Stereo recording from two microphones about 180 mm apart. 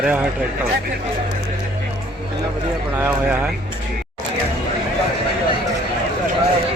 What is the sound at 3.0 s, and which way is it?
Speech, 10° right (ahead or behind).